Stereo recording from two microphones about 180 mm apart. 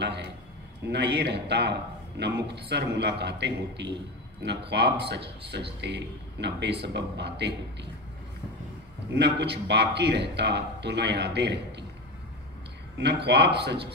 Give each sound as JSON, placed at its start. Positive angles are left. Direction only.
{"t": 0.0, "sound": "a sound", "side_deg": -70}
{"t": 0.8, "sound": "speech", "side_deg": -65}
{"t": 9.1, "sound": "speech", "side_deg": -70}
{"t": 12.9, "sound": "speech", "side_deg": -70}